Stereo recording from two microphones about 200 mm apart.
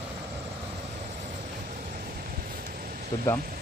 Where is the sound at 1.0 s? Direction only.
35° right (ahead or behind).